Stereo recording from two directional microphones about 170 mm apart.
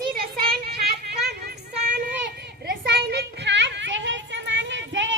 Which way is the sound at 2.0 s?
75° right (ahead or behind).